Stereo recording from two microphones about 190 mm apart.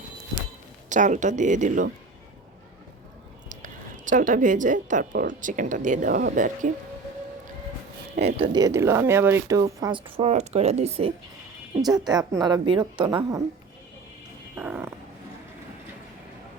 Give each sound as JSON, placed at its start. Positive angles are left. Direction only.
{"t": 0.9, "sound": "a woman's voice", "side_deg": -40}
{"t": 3.5, "sound": "speech", "side_deg": -40}
{"t": 8.2, "sound": "speech", "side_deg": -25}
{"t": 9.8, "sound": "a woman's voice", "side_deg": -30}
{"t": 11.8, "sound": "a woman's voice", "side_deg": -20}
{"t": 14.5, "sound": "a sound", "side_deg": -10}